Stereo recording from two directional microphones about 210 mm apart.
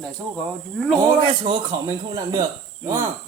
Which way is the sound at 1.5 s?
20° right (ahead or behind).